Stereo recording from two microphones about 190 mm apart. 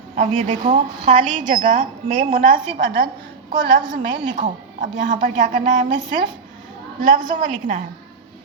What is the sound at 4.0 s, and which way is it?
A woman's voice, 45° right (ahead or behind).